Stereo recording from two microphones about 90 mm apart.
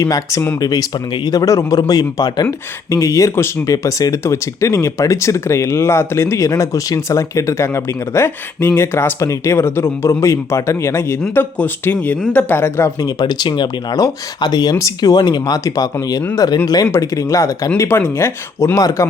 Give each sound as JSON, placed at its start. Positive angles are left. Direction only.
{"t": 0.0, "sound": "speech", "side_deg": 40}
{"t": 13.0, "sound": "speech", "side_deg": 45}
{"t": 17.7, "sound": "speech", "side_deg": 25}